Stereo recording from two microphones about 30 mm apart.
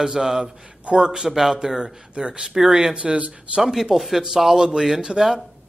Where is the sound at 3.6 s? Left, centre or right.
Centre.